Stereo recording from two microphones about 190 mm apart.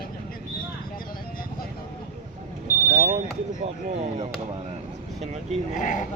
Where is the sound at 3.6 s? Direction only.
35° right (ahead or behind).